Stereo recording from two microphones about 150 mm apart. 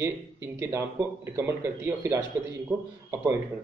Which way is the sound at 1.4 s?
15° right (ahead or behind).